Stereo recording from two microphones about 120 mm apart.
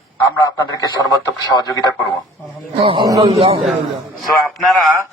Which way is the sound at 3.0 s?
35° right (ahead or behind).